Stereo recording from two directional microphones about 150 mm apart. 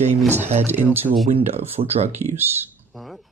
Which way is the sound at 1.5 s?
45° right (ahead or behind).